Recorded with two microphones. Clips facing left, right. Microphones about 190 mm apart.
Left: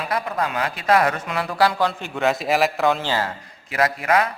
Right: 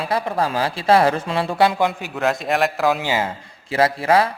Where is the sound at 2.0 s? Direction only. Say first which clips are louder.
Even; centre (ahead or behind).